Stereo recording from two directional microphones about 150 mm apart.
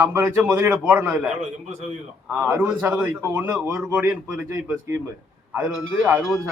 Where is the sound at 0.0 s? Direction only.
20° right (ahead or behind).